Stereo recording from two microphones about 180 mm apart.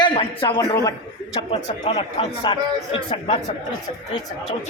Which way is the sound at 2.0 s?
25° left (ahead or behind).